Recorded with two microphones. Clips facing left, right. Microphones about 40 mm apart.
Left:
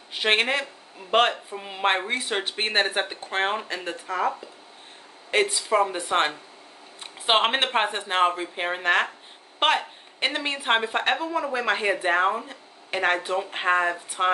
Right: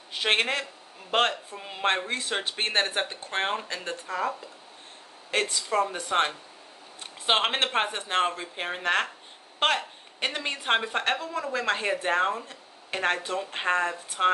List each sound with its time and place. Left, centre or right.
0.2 s a woman's voice: left
2.0 s a woman's voice: left